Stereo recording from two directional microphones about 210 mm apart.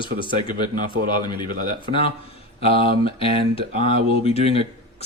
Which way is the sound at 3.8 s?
30° left (ahead or behind).